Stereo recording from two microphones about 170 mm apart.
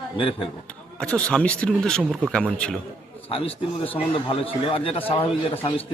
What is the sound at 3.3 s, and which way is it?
A man's voice, 35° left (ahead or behind).